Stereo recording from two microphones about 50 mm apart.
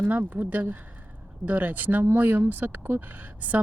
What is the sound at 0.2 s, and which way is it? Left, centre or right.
Speech, right.